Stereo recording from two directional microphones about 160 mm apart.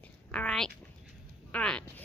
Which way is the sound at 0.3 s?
5° left (ahead or behind).